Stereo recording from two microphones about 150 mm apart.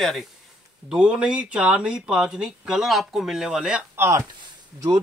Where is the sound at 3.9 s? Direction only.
15° right (ahead or behind).